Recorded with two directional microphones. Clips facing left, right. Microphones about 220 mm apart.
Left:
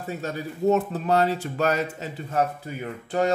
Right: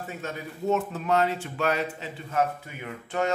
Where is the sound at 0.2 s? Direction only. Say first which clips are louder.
Left 7 dB; 35° left (ahead or behind).